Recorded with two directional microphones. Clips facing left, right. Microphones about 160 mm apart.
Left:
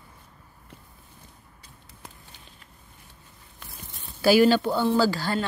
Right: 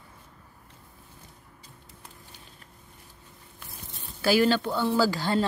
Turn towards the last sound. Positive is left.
turn(degrees=-20)  # may be behind; listen again after turning